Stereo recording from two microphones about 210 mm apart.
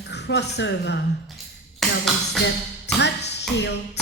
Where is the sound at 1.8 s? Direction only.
Centre (ahead or behind).